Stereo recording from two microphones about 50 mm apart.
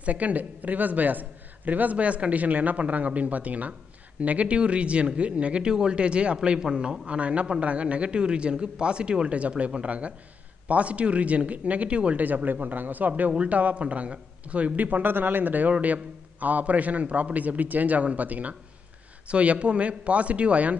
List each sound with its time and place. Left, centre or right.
0.0 s a man's voice: right